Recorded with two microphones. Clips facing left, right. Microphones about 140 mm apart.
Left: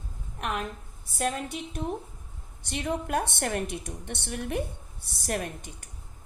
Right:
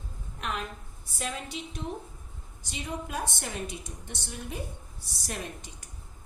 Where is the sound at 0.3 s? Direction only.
50° left (ahead or behind).